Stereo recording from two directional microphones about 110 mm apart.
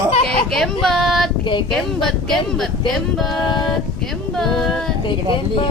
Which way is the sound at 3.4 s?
45° left (ahead or behind).